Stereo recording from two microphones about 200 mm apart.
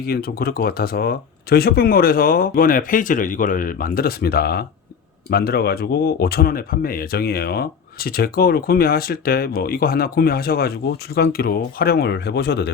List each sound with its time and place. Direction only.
0.0 s speech: 50° left (ahead or behind)